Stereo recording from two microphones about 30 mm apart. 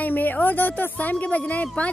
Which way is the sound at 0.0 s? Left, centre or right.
Left.